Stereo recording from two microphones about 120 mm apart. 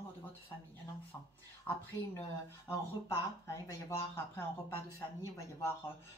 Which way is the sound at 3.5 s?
25° left (ahead or behind).